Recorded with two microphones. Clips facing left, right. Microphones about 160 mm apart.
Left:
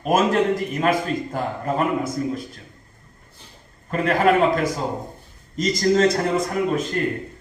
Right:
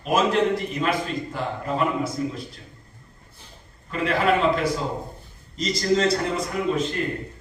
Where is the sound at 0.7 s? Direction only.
50° left (ahead or behind).